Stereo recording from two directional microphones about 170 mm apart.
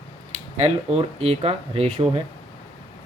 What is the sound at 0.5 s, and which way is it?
Speech, 40° right (ahead or behind).